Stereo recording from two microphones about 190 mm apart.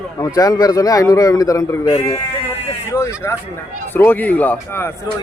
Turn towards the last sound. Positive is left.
turn(degrees=10)  # may be behind; listen again after turning